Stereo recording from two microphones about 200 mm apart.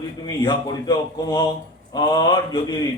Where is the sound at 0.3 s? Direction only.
20° left (ahead or behind).